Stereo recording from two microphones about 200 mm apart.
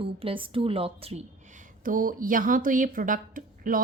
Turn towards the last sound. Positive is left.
turn(degrees=-45)  # may be behind; listen again after turning